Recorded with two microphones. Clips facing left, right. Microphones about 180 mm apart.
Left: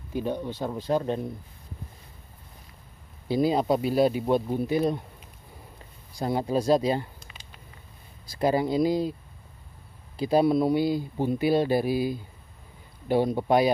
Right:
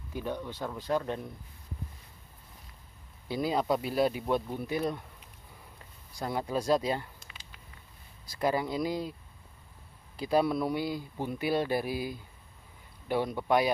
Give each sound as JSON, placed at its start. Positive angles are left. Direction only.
{"t": 0.1, "sound": "speech", "side_deg": 25}
{"t": 3.3, "sound": "speech", "side_deg": 25}
{"t": 6.1, "sound": "speech", "side_deg": 25}
{"t": 10.1, "sound": "speech", "side_deg": 25}